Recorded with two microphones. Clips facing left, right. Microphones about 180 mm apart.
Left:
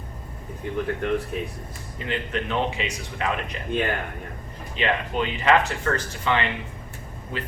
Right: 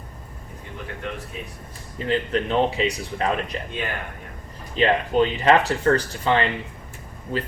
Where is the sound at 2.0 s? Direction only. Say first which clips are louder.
Right 5 dB; 35° right (ahead or behind).